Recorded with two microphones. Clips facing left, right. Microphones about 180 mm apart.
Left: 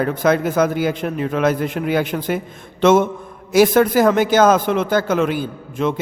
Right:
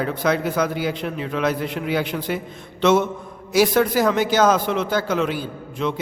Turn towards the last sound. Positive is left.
turn(degrees=50)  # may be behind; listen again after turning